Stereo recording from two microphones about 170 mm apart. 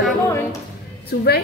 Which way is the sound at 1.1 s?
65° left (ahead or behind).